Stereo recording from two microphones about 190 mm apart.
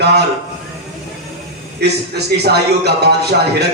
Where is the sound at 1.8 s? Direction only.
60° right (ahead or behind).